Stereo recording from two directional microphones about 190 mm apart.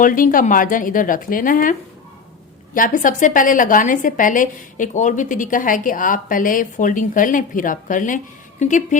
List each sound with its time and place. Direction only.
0.0 s a woman's voice: 45° left (ahead or behind)
2.7 s a woman's voice: 45° left (ahead or behind)